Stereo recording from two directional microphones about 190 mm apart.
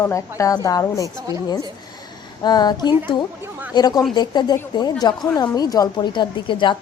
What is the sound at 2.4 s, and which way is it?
A woman's voice, 20° left (ahead or behind).